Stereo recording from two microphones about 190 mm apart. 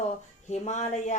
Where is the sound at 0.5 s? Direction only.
35° left (ahead or behind).